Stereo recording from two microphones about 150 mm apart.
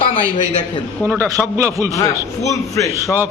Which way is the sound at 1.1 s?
20° right (ahead or behind).